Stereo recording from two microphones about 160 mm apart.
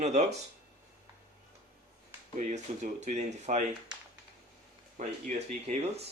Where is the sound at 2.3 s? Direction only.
50° right (ahead or behind).